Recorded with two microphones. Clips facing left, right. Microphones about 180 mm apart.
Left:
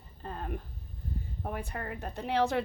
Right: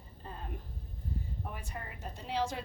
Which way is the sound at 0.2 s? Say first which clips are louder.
Left 6 dB; 65° left (ahead or behind).